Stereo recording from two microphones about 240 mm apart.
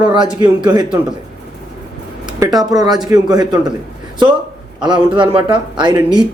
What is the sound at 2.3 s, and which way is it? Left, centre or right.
Speech, centre.